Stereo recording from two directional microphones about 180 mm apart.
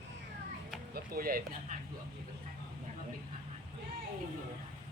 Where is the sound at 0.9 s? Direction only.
55° right (ahead or behind).